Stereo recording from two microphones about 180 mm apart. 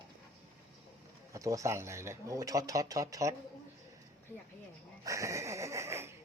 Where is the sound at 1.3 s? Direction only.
20° right (ahead or behind).